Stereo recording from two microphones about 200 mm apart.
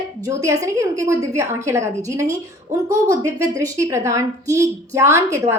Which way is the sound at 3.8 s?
15° right (ahead or behind).